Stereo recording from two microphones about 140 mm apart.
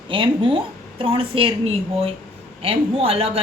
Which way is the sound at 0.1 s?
35° right (ahead or behind).